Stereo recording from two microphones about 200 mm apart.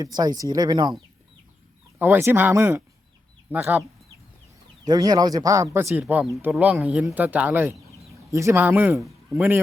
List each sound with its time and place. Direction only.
0.0 s speech: 20° right (ahead or behind)
2.0 s speech: 10° right (ahead or behind)
4.9 s speech: 20° right (ahead or behind)